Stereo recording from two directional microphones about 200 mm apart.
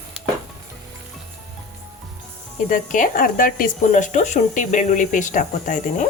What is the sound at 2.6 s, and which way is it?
Speech, 40° left (ahead or behind).